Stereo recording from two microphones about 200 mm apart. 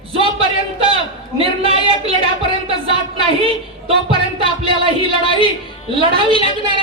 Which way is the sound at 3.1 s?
30° right (ahead or behind).